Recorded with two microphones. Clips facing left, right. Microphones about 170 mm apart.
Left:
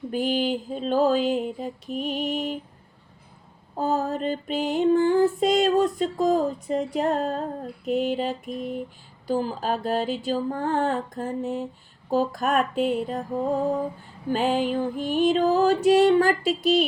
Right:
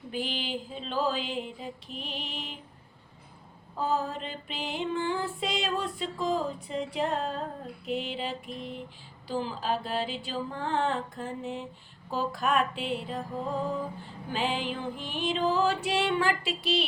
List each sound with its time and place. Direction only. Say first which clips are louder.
0.1 s music: left 9 dB; 45° left (ahead or behind)
3.8 s music: left 5 dB; 45° left (ahead or behind)